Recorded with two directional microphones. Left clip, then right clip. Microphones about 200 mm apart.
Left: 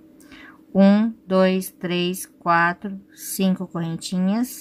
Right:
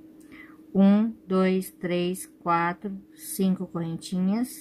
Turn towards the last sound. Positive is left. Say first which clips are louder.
# left 5 dB
turn(degrees=20)  # may be behind; listen again after turning